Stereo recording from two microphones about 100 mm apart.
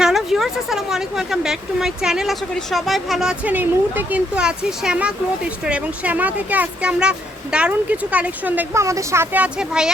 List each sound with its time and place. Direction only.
0.0 s speech: 5° right (ahead or behind)
3.5 s speech: 20° right (ahead or behind)
8.7 s a woman's voice: 30° right (ahead or behind)
9.3 s speech: 10° right (ahead or behind)